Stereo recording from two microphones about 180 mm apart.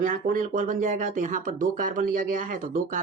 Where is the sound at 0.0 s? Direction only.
45° right (ahead or behind).